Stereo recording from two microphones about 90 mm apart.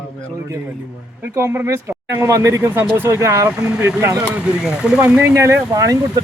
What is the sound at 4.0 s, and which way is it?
Speech, 25° right (ahead or behind).